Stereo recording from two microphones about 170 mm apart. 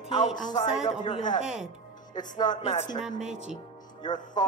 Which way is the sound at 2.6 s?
40° left (ahead or behind).